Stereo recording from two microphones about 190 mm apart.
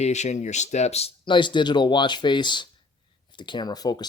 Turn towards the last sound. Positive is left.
turn(degrees=20)  # may be behind; listen again after turning